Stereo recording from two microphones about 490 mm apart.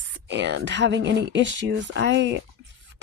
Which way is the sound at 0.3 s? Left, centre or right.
Right.